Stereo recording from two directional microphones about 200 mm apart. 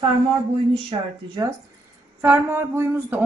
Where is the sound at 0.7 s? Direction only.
25° right (ahead or behind).